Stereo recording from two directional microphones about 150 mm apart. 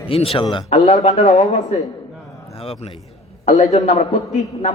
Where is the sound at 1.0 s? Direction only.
50° left (ahead or behind).